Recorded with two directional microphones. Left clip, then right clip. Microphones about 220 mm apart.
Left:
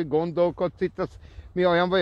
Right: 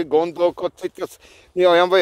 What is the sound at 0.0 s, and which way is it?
Speech, 45° right (ahead or behind).